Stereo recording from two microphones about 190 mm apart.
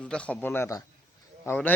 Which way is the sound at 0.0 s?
5° left (ahead or behind).